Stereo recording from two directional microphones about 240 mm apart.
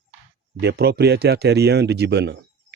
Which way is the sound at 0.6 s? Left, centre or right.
Right.